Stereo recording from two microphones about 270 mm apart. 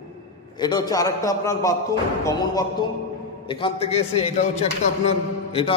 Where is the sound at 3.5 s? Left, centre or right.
Centre.